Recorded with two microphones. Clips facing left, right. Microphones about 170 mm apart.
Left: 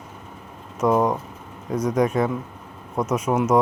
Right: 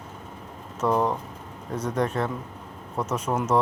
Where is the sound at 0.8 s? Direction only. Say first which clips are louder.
Left 4 dB; 10° left (ahead or behind).